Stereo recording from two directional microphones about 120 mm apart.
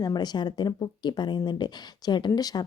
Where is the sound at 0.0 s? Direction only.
35° left (ahead or behind).